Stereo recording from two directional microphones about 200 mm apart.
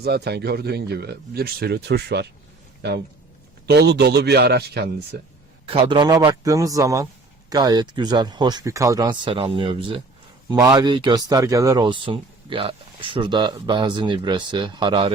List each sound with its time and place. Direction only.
0.0 s speech: 55° right (ahead or behind)
3.7 s speech: 55° right (ahead or behind)
5.6 s a man's voice: 25° right (ahead or behind)